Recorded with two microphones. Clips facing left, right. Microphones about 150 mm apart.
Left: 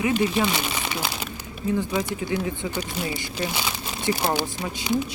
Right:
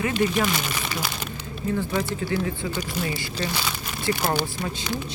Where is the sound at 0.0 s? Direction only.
15° left (ahead or behind).